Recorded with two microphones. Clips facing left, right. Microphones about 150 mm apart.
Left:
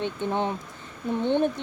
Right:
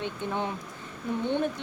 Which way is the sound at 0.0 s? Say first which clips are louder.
Left 4 dB; 25° left (ahead or behind).